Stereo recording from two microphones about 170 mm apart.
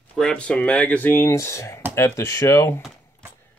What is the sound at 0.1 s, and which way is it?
Speech, 5° left (ahead or behind).